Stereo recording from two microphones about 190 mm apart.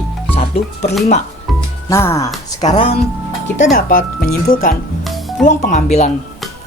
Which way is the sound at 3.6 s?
45° left (ahead or behind).